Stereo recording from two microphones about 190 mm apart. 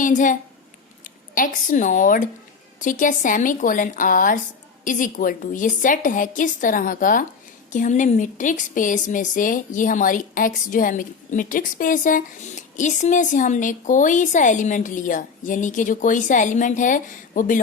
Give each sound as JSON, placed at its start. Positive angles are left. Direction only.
{"t": 0.0, "sound": "a woman's voice", "side_deg": 40}